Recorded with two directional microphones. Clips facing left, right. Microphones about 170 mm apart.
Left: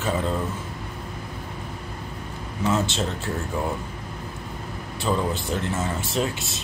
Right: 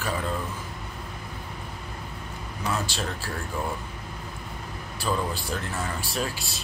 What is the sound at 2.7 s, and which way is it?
Speech, 20° left (ahead or behind).